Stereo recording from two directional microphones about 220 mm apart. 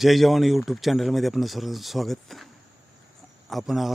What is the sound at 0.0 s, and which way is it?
Speech, centre (ahead or behind).